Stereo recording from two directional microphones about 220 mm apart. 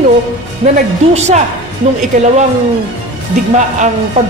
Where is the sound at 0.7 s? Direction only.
30° right (ahead or behind).